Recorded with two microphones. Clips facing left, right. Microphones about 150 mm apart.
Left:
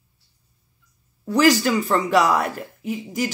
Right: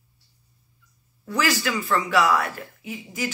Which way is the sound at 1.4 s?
40° left (ahead or behind).